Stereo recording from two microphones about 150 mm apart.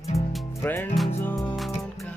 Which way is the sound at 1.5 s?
Centre (ahead or behind).